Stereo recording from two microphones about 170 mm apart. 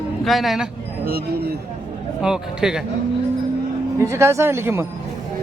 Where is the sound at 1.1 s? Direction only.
60° right (ahead or behind).